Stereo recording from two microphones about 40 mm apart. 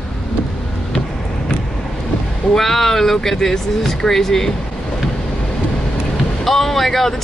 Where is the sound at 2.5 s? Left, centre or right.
Centre.